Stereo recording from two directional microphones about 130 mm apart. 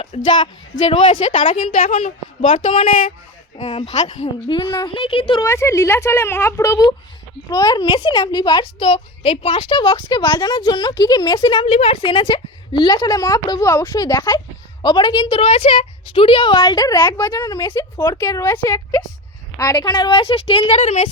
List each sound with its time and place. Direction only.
0.3 s a woman's voice: 40° left (ahead or behind)
1.5 s a woman's voice: 55° left (ahead or behind)
3.6 s speech: 60° left (ahead or behind)
4.4 s a woman's voice: 40° left (ahead or behind)
5.4 s a woman's voice: 20° left (ahead or behind); by 8.9 s 35° left (ahead or behind)
8.9 s a woman's voice: 50° left (ahead or behind)
11.7 s a woman's voice: 50° left (ahead or behind)